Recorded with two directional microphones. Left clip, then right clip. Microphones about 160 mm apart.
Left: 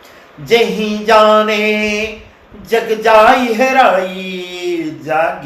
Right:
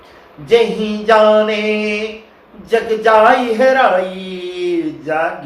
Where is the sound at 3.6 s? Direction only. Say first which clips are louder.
Left 1 dB; 35° left (ahead or behind).